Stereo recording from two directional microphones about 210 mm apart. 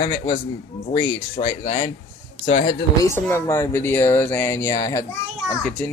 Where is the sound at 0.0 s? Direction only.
20° left (ahead or behind).